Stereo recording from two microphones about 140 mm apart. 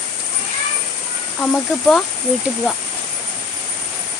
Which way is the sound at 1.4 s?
5° left (ahead or behind).